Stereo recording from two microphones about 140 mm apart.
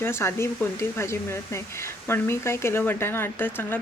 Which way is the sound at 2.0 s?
15° left (ahead or behind).